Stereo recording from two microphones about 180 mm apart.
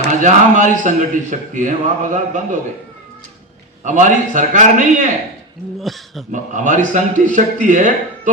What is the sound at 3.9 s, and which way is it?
A man's voice, 40° right (ahead or behind).